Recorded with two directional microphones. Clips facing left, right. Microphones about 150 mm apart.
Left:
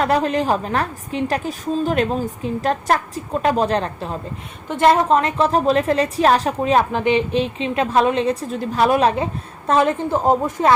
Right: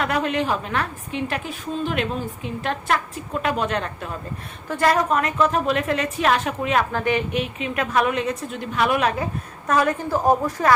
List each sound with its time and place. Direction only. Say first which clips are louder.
0.0 s a woman's voice: left 4 dB; 35° left (ahead or behind)
6.9 s a woman's voice: left 4 dB; 20° left (ahead or behind)